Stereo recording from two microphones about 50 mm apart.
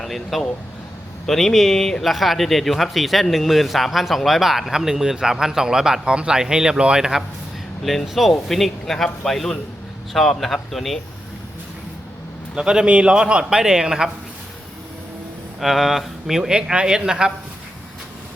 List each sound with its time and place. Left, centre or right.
0.0 s a man's voice: centre
12.5 s a man's voice: centre
15.6 s a man's voice: centre